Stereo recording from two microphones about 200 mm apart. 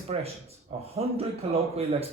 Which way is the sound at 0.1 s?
30° right (ahead or behind).